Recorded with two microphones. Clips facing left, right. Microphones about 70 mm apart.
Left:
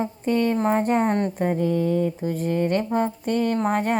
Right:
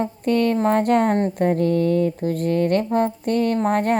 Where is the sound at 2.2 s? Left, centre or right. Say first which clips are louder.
Right 3 dB; right.